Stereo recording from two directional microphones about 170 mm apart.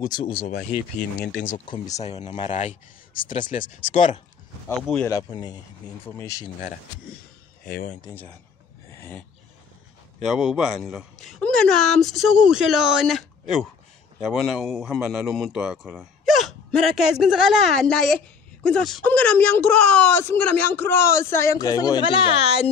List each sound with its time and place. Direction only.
0.0 s speech: 25° left (ahead or behind)
0.4 s speech: 60° left (ahead or behind)
2.0 s speech: 40° left (ahead or behind)
5.0 s speech: 20° left (ahead or behind)
7.6 s speech: 55° left (ahead or behind)
8.1 s speech: 10° left (ahead or behind)
8.9 s a sound: 15° left (ahead or behind)
10.2 s speech: centre (ahead or behind); by 22.7 s 35° left (ahead or behind)